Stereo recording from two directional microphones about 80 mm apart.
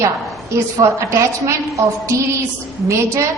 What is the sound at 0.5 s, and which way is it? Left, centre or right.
A woman's voice, right.